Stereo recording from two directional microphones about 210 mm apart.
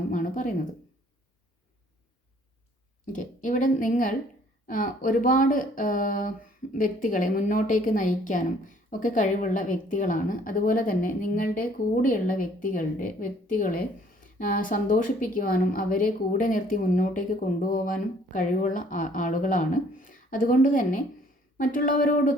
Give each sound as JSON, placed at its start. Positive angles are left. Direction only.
{"t": 0.1, "sound": "speech", "side_deg": 40}
{"t": 3.1, "sound": "a woman's voice", "side_deg": 40}